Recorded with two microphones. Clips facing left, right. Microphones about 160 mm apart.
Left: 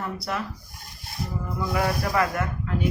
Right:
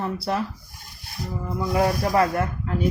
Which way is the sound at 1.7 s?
30° right (ahead or behind).